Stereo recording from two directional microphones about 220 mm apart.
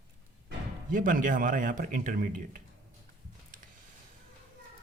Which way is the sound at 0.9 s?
40° right (ahead or behind).